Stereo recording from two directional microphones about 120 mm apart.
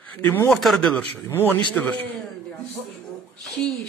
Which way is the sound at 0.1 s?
15° left (ahead or behind).